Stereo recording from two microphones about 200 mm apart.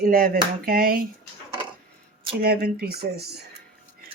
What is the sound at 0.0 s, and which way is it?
Speech, 45° right (ahead or behind).